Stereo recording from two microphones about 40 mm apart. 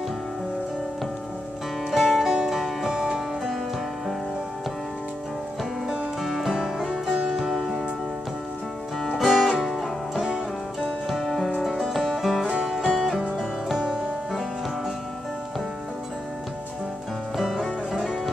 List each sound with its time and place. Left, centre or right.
1.9 s music: centre
5.9 s music: centre
7.2 s music: centre
9.2 s music: centre
10.2 s music: centre
11.1 s music: centre
17.4 s music: centre